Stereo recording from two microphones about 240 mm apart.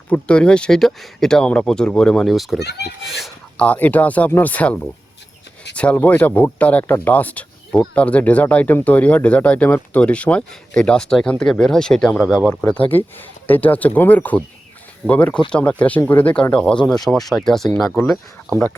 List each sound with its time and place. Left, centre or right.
0.1 s speech: centre
2.6 s a child's voice: left
3.1 s speech: centre